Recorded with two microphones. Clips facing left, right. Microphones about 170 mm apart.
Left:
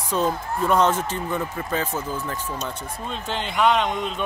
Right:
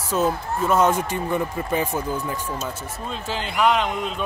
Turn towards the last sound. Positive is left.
turn(degrees=0)  # may be behind; listen again after turning